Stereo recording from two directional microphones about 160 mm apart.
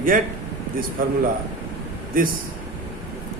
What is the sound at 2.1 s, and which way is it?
Speech, 60° right (ahead or behind).